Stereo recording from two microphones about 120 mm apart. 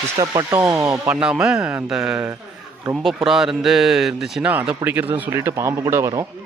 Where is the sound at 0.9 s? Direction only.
5° right (ahead or behind).